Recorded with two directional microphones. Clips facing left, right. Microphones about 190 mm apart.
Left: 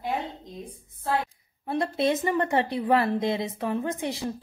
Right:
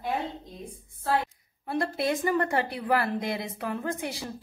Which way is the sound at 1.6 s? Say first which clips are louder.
Left 3 dB; 20° left (ahead or behind).